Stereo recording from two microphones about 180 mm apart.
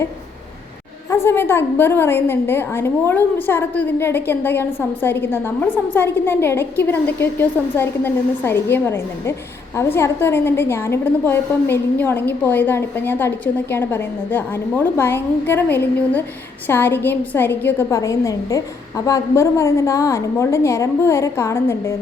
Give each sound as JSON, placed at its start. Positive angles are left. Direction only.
{"t": 1.1, "sound": "a woman's voice", "side_deg": 15}